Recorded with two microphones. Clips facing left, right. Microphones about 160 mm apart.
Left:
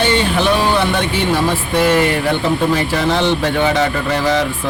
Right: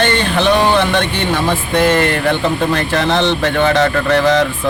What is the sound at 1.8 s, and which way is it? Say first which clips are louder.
Speech: even; 10° left (ahead or behind).